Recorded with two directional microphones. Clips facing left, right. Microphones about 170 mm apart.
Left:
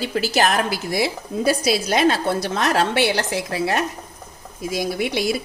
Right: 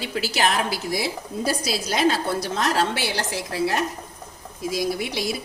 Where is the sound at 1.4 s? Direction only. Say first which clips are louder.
Left 7 dB; 65° left (ahead or behind).